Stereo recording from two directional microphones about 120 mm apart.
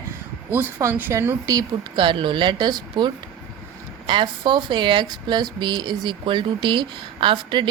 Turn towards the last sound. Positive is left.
turn(degrees=-45)  # may be behind; listen again after turning